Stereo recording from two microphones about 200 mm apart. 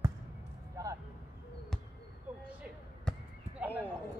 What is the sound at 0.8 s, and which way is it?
Vehicle, 15° right (ahead or behind).